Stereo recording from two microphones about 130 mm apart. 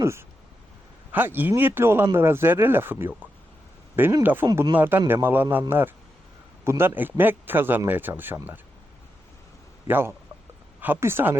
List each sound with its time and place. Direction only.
0.0 s a man's voice: 20° right (ahead or behind)
9.8 s a man's voice: 20° right (ahead or behind)